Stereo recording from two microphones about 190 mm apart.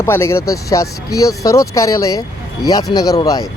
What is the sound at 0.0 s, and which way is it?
Speech, 15° left (ahead or behind).